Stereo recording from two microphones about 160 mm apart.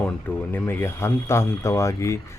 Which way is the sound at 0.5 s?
15° left (ahead or behind).